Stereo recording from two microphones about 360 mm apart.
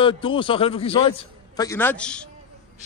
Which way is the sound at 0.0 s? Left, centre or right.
Centre.